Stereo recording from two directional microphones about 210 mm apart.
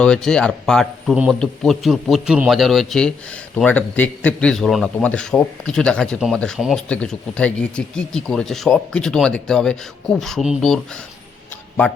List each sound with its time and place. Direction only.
0.0 s a man's voice: 5° left (ahead or behind)